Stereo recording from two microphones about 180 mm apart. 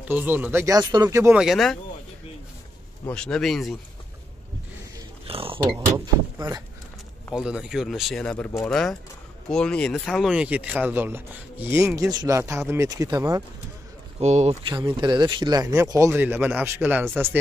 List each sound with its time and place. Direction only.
0.0 s speech: 10° right (ahead or behind)
1.4 s speech: centre (ahead or behind)
3.1 s speech: 5° left (ahead or behind)
5.2 s a sound: 30° right (ahead or behind)
5.8 s speech: 15° right (ahead or behind)
7.3 s speech: 5° right (ahead or behind)
14.2 s speech: 40° right (ahead or behind)
14.9 s speech: 25° right (ahead or behind)